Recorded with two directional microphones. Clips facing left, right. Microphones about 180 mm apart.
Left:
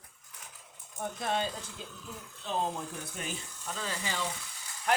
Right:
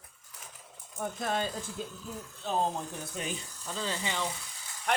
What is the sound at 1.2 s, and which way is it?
Speech, 45° right (ahead or behind).